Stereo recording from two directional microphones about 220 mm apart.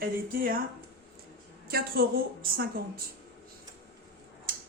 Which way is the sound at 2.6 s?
40° right (ahead or behind).